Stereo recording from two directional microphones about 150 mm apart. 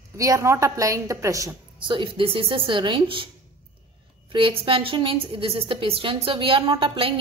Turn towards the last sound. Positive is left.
turn(degrees=-35)  # may be behind; listen again after turning